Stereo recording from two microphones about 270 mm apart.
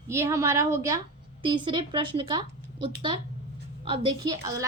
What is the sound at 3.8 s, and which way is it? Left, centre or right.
Speech, centre.